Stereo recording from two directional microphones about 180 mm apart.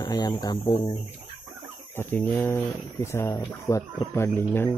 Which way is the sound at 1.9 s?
10° left (ahead or behind).